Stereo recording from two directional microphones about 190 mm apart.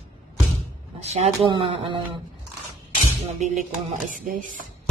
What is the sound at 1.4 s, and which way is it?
Speech, 25° right (ahead or behind).